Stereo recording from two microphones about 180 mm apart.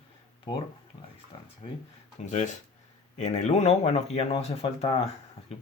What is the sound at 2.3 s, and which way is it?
Speech, 40° left (ahead or behind).